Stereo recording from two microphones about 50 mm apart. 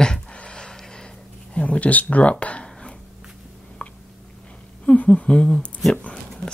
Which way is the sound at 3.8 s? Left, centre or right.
Left.